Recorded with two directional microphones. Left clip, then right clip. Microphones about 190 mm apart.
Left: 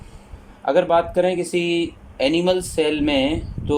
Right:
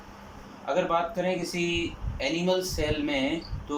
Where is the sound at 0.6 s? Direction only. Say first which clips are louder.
Left 9 dB; 60° left (ahead or behind).